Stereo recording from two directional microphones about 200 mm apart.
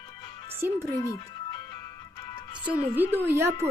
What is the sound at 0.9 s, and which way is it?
Music, 15° left (ahead or behind).